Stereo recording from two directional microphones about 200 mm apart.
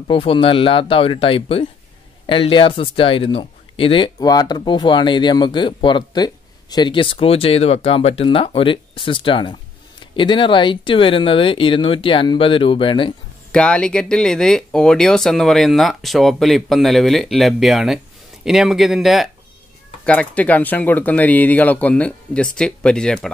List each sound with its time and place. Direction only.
0.1 s speech: 25° left (ahead or behind)
13.5 s speech: 5° left (ahead or behind)